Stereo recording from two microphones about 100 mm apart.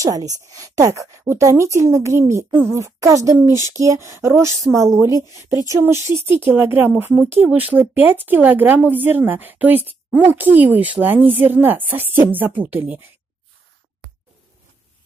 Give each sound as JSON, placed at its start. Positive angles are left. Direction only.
{"t": 0.0, "sound": "speech", "side_deg": -35}